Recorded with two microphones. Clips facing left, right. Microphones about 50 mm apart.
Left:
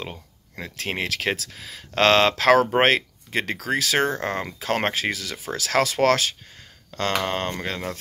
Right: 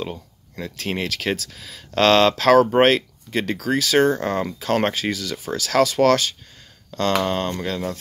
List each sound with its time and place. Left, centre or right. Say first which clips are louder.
0.6 s speech: right 2 dB; left
6.9 s a sound: right 3 dB; left
7.2 s speech: right 3 dB; left